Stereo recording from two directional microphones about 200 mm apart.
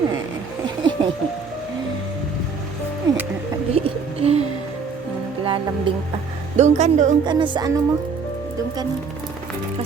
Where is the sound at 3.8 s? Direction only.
30° right (ahead or behind).